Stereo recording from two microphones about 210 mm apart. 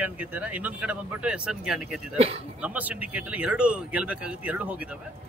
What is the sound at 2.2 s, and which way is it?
Speech, 30° right (ahead or behind).